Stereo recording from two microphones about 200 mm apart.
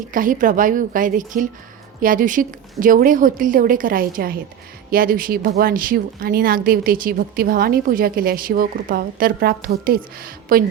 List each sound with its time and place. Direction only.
0.1 s a woman's voice: 40° right (ahead or behind)